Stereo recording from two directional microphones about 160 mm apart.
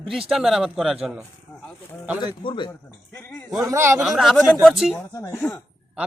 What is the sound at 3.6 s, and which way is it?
Speech, 20° right (ahead or behind).